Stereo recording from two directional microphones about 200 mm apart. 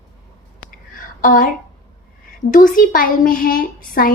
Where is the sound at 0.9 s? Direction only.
45° left (ahead or behind).